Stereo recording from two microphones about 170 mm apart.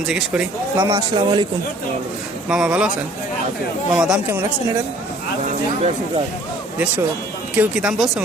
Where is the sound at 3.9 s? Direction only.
5° right (ahead or behind).